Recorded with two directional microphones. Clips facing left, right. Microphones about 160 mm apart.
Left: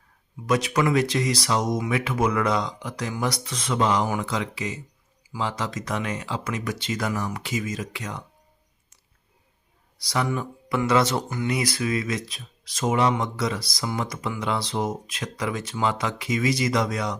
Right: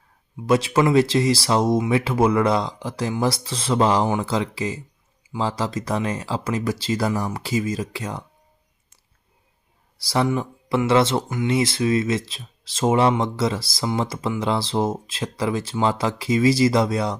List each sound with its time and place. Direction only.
0.4 s speech: 30° right (ahead or behind)
10.0 s speech: 30° right (ahead or behind)